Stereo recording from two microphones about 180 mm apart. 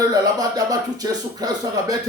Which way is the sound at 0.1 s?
20° right (ahead or behind).